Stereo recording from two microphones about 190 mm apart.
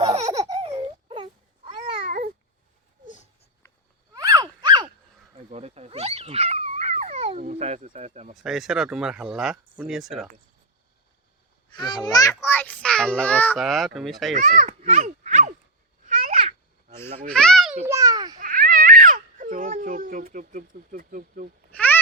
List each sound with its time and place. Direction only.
0.4 s wail: 30° right (ahead or behind)
2.0 s babbling: 45° right (ahead or behind)
4.1 s a sound: 20° right (ahead or behind)
5.5 s dog: 35° right (ahead or behind)
8.4 s speech: centre (ahead or behind)
11.7 s a child's voice: 25° left (ahead or behind); by 14.3 s centre (ahead or behind)
14.3 s a sound: 40° right (ahead or behind)
16.0 s babbling: 40° right (ahead or behind)
17.2 s a sound: 5° left (ahead or behind)
17.8 s a sound: 15° right (ahead or behind)
18.3 s baby cry: 45° right (ahead or behind)
21.7 s babbling: 10° left (ahead or behind)